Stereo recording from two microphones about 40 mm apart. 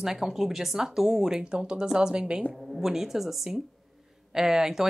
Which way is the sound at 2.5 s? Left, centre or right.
Centre.